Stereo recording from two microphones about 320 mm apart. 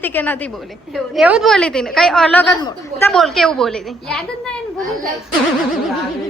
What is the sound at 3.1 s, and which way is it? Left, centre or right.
A woman's voice, centre.